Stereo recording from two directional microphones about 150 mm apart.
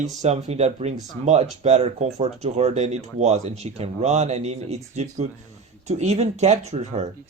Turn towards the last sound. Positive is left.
turn(degrees=-50)  # may be behind; listen again after turning